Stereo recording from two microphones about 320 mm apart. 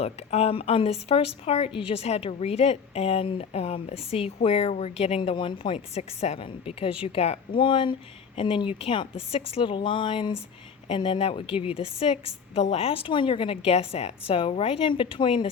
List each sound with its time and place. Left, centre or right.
0.0 s a woman's voice: centre